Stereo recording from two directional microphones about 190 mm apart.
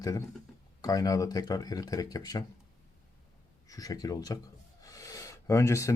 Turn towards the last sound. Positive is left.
turn(degrees=15)  # may be behind; listen again after turning